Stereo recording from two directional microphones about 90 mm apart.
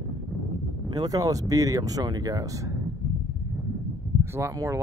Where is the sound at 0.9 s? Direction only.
45° right (ahead or behind).